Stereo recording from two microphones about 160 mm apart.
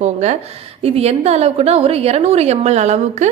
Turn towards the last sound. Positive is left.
turn(degrees=-45)  # may be behind; listen again after turning